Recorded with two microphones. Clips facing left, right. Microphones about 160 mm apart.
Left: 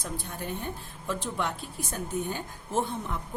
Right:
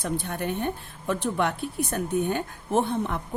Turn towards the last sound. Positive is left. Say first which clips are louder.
# right 6 dB
turn(degrees=-65)  # may be behind; listen again after turning